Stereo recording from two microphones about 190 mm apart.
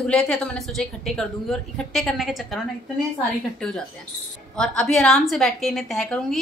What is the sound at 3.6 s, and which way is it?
A woman's voice, 5° left (ahead or behind).